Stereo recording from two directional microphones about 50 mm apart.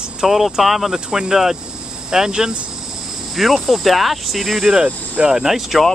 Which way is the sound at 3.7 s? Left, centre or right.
Centre.